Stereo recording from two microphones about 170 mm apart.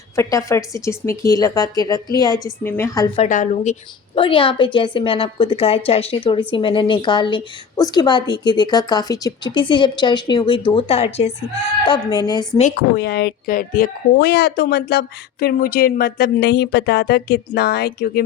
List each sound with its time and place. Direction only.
0.2 s a woman's voice: 20° left (ahead or behind)
3.2 s a woman's voice: 50° left (ahead or behind)
4.2 s a woman's voice: 30° left (ahead or behind)
11.9 s a woman's voice: 25° left (ahead or behind)
13.0 s speech: 70° left (ahead or behind)